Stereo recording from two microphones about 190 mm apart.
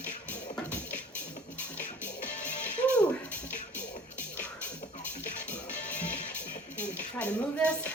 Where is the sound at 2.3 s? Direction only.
40° left (ahead or behind).